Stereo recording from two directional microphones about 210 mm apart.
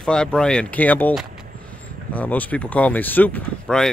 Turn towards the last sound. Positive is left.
turn(degrees=5)  # may be behind; listen again after turning